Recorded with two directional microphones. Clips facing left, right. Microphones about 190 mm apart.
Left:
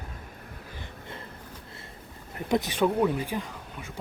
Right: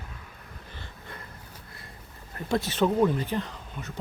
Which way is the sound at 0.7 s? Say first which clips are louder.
Left 2 dB; 20° left (ahead or behind).